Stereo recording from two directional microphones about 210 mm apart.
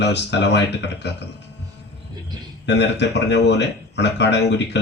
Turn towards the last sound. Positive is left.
turn(degrees=55)  # may be behind; listen again after turning